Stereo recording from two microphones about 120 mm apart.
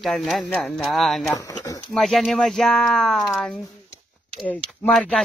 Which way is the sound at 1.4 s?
30° left (ahead or behind).